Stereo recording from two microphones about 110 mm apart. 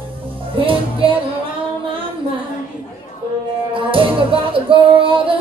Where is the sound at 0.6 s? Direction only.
55° right (ahead or behind).